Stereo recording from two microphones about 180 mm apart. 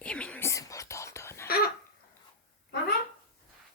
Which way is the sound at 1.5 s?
60° left (ahead or behind).